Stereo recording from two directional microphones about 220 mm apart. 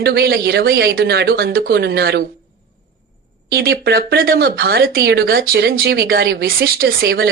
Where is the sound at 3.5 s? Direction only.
45° right (ahead or behind).